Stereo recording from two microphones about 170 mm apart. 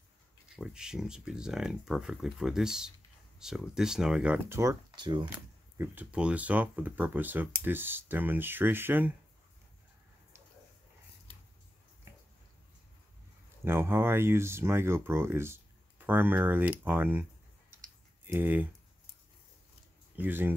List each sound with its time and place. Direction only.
0.6 s speech: 5° right (ahead or behind)
4.6 s speech: 20° right (ahead or behind)
5.8 s speech: 10° right (ahead or behind)
13.7 s speech: 15° right (ahead or behind)
20.2 s speech: 10° right (ahead or behind)